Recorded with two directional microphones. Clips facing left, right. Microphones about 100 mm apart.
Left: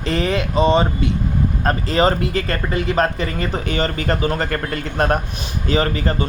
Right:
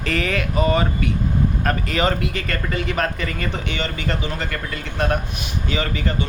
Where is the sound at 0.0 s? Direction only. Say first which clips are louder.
Left 3 dB; 30° left (ahead or behind).